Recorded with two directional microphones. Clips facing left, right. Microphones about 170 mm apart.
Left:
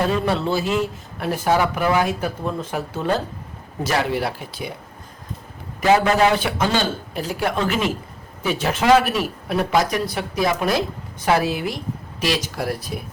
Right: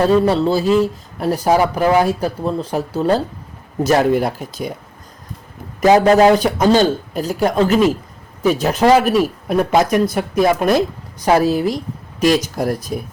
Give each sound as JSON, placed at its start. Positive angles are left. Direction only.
{"t": 0.1, "sound": "a man's voice", "side_deg": -40}
{"t": 5.8, "sound": "a man's voice", "side_deg": -35}